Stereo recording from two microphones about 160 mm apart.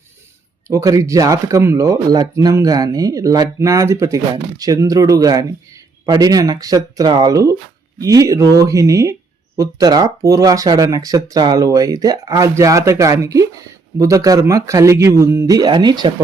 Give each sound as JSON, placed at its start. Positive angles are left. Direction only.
{"t": 0.7, "sound": "speech", "side_deg": -20}